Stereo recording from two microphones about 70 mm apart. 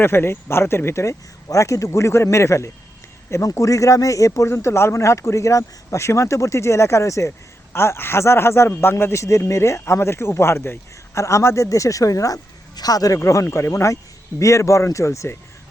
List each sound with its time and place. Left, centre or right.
0.0 s speech: left
4.4 s speech: left
13.1 s speech: left